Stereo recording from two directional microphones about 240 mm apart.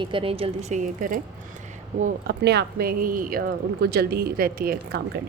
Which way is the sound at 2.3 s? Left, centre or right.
Right.